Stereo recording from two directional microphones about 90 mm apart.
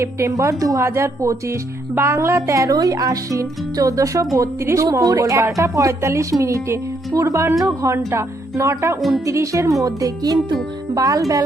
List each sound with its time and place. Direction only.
0.0 s speech: 30° right (ahead or behind)
9.0 s speech: centre (ahead or behind)
9.2 s speech: 35° right (ahead or behind)
9.8 s music: 45° right (ahead or behind)
10.9 s speech: 40° right (ahead or behind)